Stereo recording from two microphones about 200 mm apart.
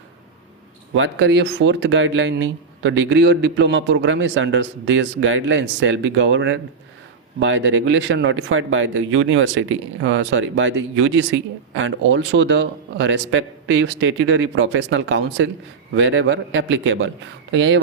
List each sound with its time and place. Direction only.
0.9 s speech: 65° right (ahead or behind)